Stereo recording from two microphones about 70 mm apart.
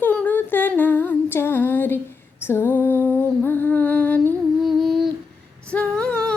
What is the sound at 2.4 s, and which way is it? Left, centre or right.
Music, left.